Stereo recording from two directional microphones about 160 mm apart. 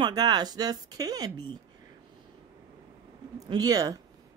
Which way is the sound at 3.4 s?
25° right (ahead or behind).